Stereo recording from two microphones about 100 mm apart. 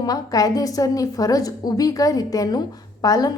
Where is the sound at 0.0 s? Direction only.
40° left (ahead or behind).